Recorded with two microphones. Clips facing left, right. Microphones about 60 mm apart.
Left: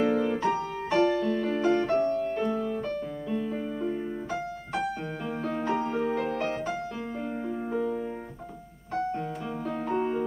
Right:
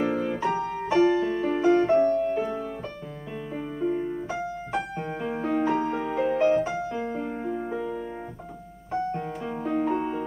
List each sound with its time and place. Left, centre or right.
0.0 s music: centre
2.0 s music: right
2.3 s music: centre
5.7 s music: centre
8.9 s piano: centre
9.5 s music: centre
9.9 s music: centre